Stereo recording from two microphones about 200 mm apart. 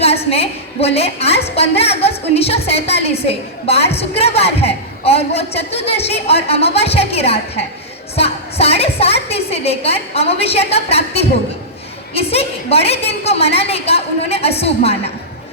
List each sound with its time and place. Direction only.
0.0 s a woman's voice: 30° left (ahead or behind)